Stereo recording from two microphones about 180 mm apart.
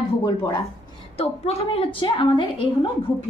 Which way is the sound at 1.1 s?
35° left (ahead or behind).